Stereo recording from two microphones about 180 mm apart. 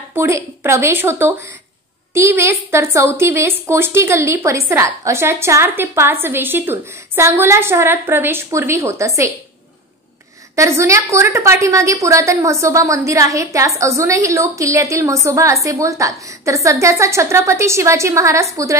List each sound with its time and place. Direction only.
0.1 s a woman's voice: 15° right (ahead or behind)
10.5 s a woman's voice: 15° right (ahead or behind)